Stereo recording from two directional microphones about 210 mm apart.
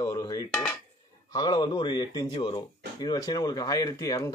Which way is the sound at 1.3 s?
20° left (ahead or behind).